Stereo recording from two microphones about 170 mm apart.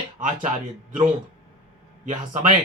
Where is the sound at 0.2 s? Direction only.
45° right (ahead or behind).